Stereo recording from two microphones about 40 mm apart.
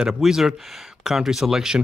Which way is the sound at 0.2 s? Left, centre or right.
Centre.